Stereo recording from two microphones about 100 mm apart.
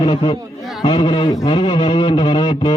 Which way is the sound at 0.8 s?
55° left (ahead or behind).